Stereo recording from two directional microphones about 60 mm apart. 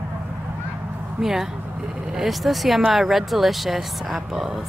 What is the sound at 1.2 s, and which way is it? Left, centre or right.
A woman's voice, centre.